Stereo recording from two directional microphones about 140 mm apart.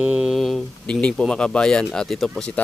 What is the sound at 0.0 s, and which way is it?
Speech, 5° right (ahead or behind).